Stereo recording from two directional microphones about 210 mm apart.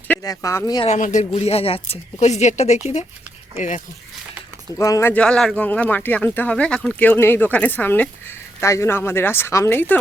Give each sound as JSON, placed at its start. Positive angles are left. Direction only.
{"t": 0.1, "sound": "speech", "side_deg": 15}
{"t": 0.9, "sound": "a man's voice", "side_deg": 35}
{"t": 4.8, "sound": "speech", "side_deg": 15}